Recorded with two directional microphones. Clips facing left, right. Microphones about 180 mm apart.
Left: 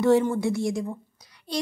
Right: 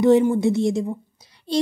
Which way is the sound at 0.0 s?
15° right (ahead or behind).